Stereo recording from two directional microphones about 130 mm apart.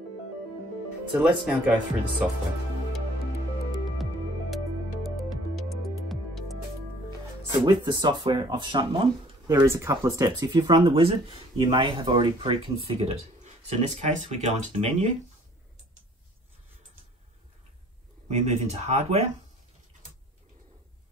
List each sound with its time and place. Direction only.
1.6 s speech: 10° right (ahead or behind)
5.0 s music: centre (ahead or behind)
7.5 s speech: 35° right (ahead or behind)
9.5 s speech: 20° right (ahead or behind); by 13.1 s 40° right (ahead or behind)
13.4 s speech: 60° right (ahead or behind)
18.3 s speech: 65° right (ahead or behind)